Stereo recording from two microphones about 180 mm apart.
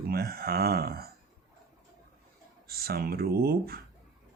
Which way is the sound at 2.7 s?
55° right (ahead or behind).